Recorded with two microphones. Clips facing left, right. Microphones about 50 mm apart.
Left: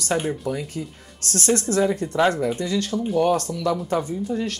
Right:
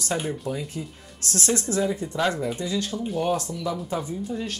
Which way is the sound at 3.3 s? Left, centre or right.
Left.